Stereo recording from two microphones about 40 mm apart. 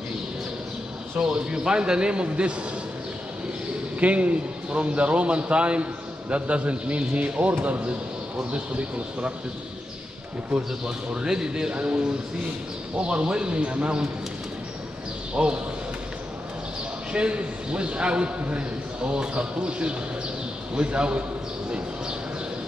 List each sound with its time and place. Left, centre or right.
1.2 s a man's voice: right
4.0 s a man's voice: right
11.1 s a man's voice: centre
11.7 s a man's voice: right
15.3 s a man's voice: right
17.1 s a man's voice: right